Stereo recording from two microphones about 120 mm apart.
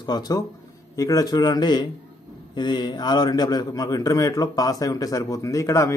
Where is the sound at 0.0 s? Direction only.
35° left (ahead or behind).